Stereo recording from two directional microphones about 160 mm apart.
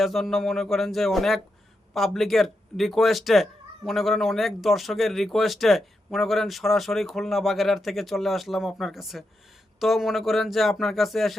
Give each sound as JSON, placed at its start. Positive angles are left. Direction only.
{"t": 0.0, "sound": "speech", "side_deg": 0}